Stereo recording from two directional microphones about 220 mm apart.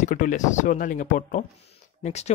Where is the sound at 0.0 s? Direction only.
35° left (ahead or behind).